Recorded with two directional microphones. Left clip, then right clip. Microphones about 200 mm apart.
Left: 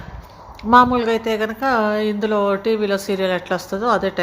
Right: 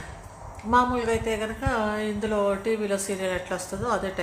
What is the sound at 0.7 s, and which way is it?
Speech, 35° left (ahead or behind).